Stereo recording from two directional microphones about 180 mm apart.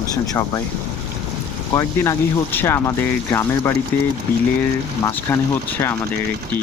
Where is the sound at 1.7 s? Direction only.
15° left (ahead or behind).